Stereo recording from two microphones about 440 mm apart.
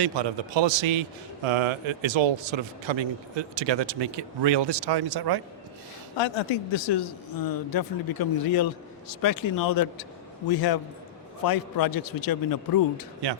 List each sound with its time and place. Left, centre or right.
0.0 s a man's voice: right
6.1 s a man's voice: left